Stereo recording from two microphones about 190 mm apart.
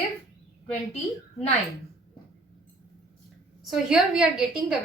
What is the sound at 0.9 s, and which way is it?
Speech, 35° left (ahead or behind).